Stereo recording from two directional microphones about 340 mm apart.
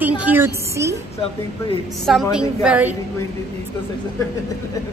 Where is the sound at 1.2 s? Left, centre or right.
Centre.